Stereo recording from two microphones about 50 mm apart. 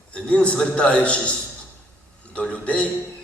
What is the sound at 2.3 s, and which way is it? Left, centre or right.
Speech, left.